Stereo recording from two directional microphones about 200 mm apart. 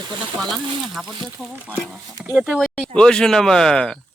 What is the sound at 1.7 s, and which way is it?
Speech, centre (ahead or behind).